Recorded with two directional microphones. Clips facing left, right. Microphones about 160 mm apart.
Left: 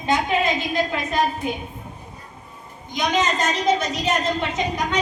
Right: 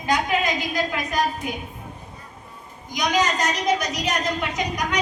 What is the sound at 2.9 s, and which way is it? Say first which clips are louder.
A woman's voice: left 1 dB; 25° left (ahead or behind).